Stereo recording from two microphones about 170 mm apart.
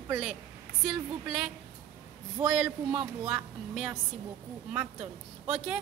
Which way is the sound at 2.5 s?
5° right (ahead or behind).